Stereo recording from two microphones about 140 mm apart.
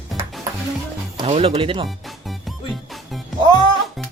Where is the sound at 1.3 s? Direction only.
45° right (ahead or behind).